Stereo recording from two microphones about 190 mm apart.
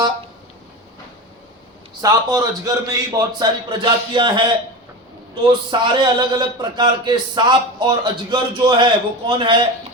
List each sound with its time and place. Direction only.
2.0 s a man's voice: 20° right (ahead or behind)